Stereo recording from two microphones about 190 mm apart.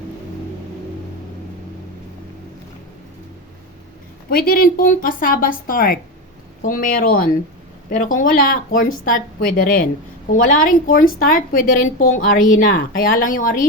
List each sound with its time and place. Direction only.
4.3 s a woman's voice: 50° left (ahead or behind)